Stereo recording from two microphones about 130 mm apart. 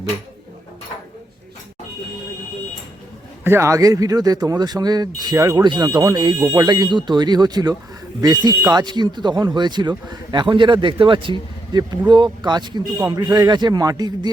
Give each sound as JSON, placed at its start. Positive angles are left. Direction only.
{"t": 3.4, "sound": "speech", "side_deg": -20}